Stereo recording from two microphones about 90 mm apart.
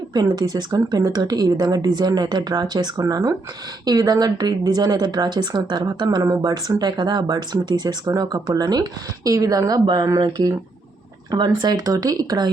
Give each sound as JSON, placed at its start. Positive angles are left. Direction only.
{"t": 0.1, "sound": "a woman's voice", "side_deg": -50}
{"t": 10.2, "sound": "a woman's voice", "side_deg": -60}